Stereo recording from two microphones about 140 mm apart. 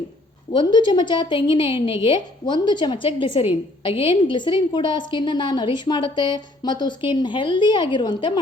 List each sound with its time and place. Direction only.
0.5 s a woman's voice: 35° left (ahead or behind)